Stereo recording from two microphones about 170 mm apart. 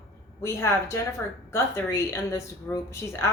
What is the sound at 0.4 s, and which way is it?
A woman's voice, 15° left (ahead or behind).